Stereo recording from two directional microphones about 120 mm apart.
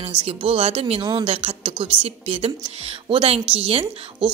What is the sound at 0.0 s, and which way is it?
A woman's voice, 55° right (ahead or behind).